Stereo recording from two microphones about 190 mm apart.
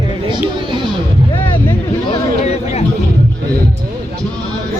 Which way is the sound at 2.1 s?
35° left (ahead or behind).